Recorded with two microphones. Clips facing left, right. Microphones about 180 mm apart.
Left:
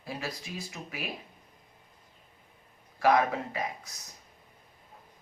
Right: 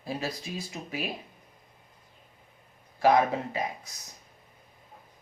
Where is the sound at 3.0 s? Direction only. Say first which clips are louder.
Right 2 dB; 25° right (ahead or behind).